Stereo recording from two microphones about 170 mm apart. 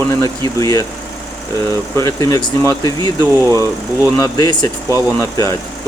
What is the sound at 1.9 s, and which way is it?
Speech, 20° left (ahead or behind).